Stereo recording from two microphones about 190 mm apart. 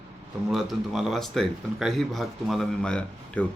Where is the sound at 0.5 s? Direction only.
Centre (ahead or behind).